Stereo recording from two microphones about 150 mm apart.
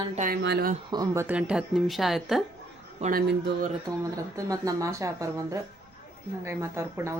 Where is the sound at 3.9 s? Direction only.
20° right (ahead or behind).